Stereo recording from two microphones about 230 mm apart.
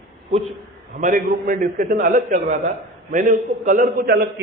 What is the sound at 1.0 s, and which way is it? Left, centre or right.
A man's voice, right.